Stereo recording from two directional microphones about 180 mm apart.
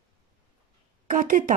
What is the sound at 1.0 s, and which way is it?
Speech, 50° right (ahead or behind).